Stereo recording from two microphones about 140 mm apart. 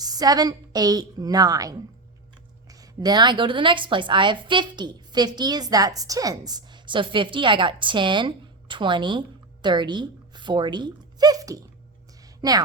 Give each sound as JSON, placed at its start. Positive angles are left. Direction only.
{"t": 0.0, "sound": "a woman's voice", "side_deg": -25}